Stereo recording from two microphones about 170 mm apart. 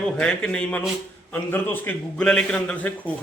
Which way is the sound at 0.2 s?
5° left (ahead or behind).